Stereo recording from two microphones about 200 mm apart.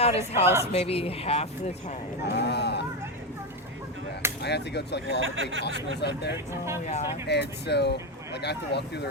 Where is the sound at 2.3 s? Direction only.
55° left (ahead or behind).